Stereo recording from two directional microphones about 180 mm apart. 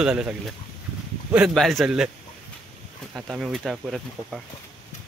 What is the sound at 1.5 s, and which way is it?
Speech, centre (ahead or behind).